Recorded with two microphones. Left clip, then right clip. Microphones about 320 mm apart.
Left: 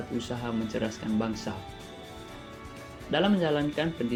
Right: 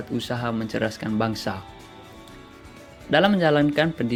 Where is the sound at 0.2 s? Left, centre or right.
Right.